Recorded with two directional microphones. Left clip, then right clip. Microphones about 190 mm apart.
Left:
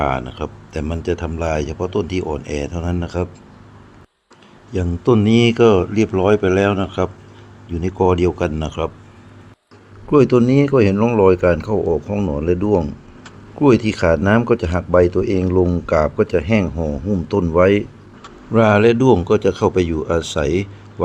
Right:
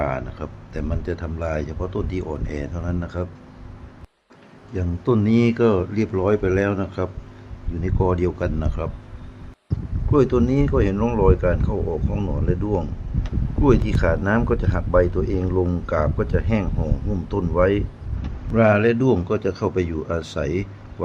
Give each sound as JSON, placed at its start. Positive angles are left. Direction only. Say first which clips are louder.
{"t": 0.0, "sound": "speech", "louder": "left 5 dB", "side_deg": 20}
{"t": 4.7, "sound": "speech", "louder": "left 6 dB", "side_deg": 20}
{"t": 10.1, "sound": "speech", "louder": "left 6 dB", "side_deg": 25}